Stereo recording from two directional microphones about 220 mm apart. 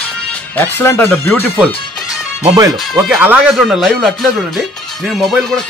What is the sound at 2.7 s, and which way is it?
Speech, centre (ahead or behind).